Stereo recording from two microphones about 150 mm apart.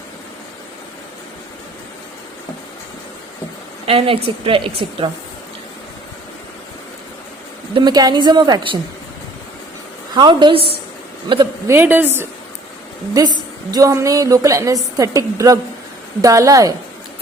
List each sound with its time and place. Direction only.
3.8 s a woman's voice: 40° right (ahead or behind)
7.7 s a woman's voice: 30° right (ahead or behind)
10.2 s a woman's voice: 30° right (ahead or behind)
11.7 s a woman's voice: 15° right (ahead or behind)
13.1 s a woman's voice: 25° right (ahead or behind)